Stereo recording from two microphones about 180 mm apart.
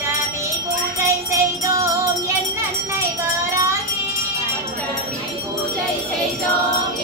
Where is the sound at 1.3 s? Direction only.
15° right (ahead or behind).